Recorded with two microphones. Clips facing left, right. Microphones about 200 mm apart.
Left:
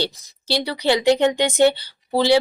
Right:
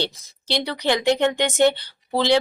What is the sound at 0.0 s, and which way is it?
Speech, 10° left (ahead or behind).